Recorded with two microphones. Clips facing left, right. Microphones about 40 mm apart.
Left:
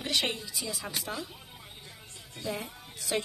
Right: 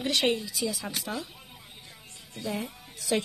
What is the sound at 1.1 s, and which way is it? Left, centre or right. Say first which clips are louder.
Speech: right 3 dB; centre.